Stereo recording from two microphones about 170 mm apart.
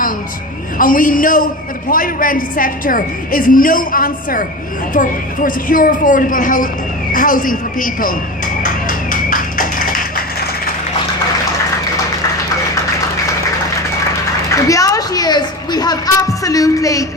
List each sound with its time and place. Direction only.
0.8 s a woman's voice: 55° left (ahead or behind)
8.6 s tap: 50° left (ahead or behind)
14.5 s a sound: 20° left (ahead or behind)
16.4 s music: 20° left (ahead or behind)